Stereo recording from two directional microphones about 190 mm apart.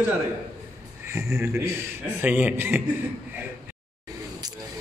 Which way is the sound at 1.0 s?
15° right (ahead or behind).